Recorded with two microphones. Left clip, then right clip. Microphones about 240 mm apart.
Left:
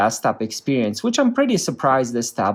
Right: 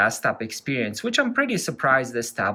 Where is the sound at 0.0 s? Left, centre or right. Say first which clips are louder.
Left 3 dB; centre.